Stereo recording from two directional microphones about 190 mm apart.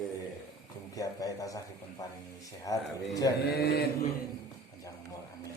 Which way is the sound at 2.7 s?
20° left (ahead or behind).